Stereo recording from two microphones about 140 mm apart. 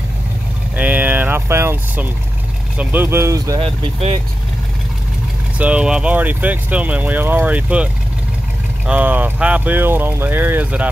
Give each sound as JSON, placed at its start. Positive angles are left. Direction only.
{"t": 0.7, "sound": "boat", "side_deg": -10}
{"t": 2.8, "sound": "speech", "side_deg": -15}
{"t": 3.6, "sound": "speech", "side_deg": -45}
{"t": 5.6, "sound": "speech", "side_deg": -10}